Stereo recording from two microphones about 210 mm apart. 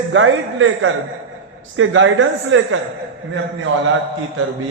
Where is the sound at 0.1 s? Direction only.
70° right (ahead or behind).